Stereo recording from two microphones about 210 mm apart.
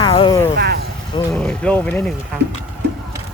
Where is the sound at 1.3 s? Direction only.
5° left (ahead or behind).